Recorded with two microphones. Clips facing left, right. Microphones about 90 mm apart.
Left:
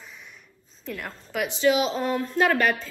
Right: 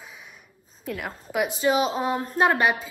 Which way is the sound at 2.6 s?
10° right (ahead or behind).